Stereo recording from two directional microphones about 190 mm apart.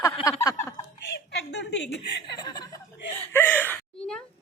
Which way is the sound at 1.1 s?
65° left (ahead or behind).